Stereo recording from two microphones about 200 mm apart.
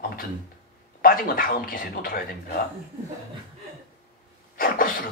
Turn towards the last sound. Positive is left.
turn(degrees=45)  # may be behind; listen again after turning